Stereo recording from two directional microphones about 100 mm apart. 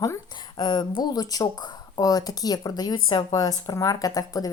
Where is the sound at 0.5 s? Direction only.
45° left (ahead or behind).